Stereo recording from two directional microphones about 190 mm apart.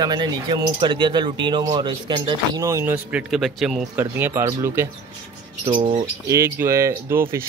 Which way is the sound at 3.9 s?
10° right (ahead or behind).